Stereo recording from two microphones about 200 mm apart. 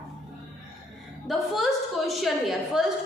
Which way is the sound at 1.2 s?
Centre (ahead or behind).